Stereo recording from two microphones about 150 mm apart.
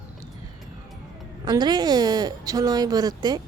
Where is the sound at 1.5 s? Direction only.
30° right (ahead or behind).